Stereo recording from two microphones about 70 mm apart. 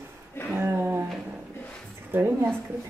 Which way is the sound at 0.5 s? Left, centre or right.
Right.